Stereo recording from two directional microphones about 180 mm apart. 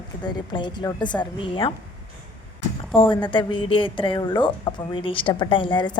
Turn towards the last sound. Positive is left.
turn(degrees=25)  # may be behind; listen again after turning